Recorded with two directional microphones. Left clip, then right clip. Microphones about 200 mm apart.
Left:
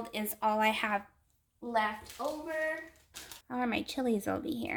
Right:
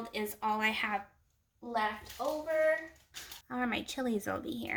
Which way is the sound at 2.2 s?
50° left (ahead or behind).